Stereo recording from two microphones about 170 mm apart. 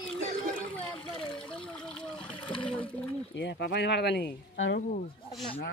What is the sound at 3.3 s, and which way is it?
Speech, 90° left.